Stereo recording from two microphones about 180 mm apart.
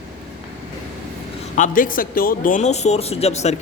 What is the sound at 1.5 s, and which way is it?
Speech, 45° left (ahead or behind).